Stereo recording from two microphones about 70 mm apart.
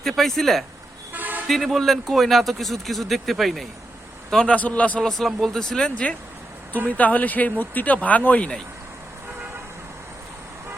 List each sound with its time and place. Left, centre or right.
0.0 s speech: centre
1.1 s toot: right
1.5 s a man's voice: centre
4.5 s speech: left
5.0 s speech: centre; by 8.4 s left